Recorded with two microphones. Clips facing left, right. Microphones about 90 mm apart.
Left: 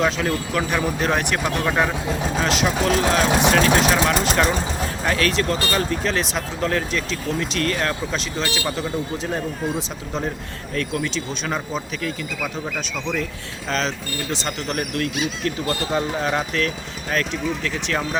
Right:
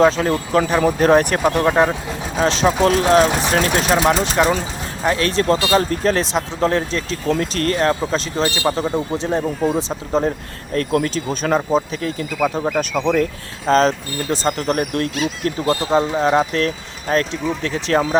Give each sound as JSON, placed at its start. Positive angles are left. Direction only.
{"t": 0.0, "sound": "speech", "side_deg": -35}
{"t": 1.6, "sound": "speech", "side_deg": -25}
{"t": 4.4, "sound": "speech", "side_deg": -20}
{"t": 5.0, "sound": "speech", "side_deg": -30}
{"t": 6.3, "sound": "speech", "side_deg": -30}
{"t": 12.5, "sound": "speech", "side_deg": -60}
{"t": 13.7, "sound": "speech", "side_deg": -40}